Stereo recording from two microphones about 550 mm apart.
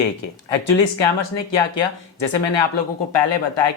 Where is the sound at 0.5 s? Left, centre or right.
Left.